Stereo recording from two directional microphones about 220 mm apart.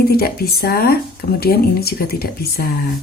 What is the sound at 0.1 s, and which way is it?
Speech, 45° left (ahead or behind).